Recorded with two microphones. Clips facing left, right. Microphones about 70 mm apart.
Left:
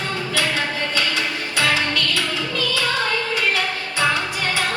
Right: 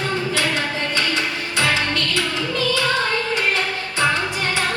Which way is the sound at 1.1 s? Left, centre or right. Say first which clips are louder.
Right 1 dB; right.